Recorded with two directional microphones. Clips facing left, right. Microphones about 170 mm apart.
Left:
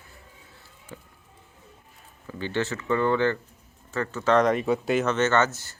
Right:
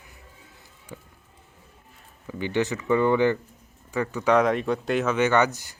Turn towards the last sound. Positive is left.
turn(degrees=-15)  # may be behind; listen again after turning